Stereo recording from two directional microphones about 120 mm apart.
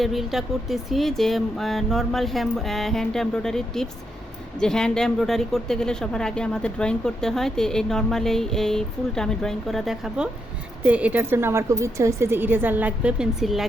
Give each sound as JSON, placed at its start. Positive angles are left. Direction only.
{"t": 0.0, "sound": "a woman's voice", "side_deg": 0}